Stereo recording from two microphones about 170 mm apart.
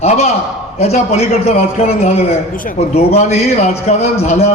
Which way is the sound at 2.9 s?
40° left (ahead or behind).